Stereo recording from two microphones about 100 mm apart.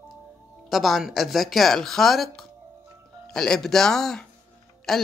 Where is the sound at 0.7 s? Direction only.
Centre (ahead or behind).